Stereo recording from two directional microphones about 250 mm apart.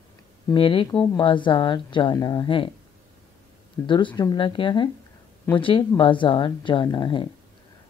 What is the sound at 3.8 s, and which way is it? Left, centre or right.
Speech, centre.